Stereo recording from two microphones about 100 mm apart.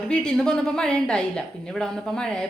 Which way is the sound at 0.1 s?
10° left (ahead or behind).